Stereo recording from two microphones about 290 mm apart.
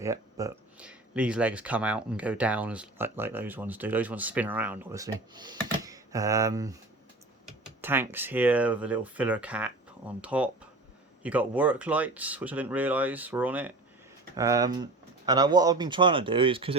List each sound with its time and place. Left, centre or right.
0.0 s speech: centre